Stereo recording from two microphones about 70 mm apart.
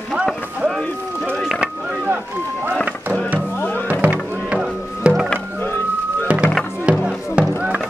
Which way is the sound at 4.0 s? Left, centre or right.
Right.